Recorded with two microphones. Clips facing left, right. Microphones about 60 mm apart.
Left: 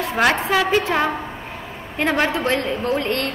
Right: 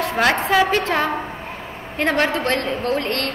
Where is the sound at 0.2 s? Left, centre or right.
Centre.